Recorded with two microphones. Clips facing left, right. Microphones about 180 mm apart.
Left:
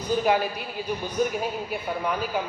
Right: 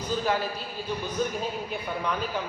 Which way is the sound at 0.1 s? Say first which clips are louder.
Left 5 dB; 15° left (ahead or behind).